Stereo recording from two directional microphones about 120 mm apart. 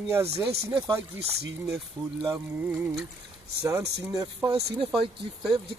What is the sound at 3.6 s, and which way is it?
Speech, 30° right (ahead or behind).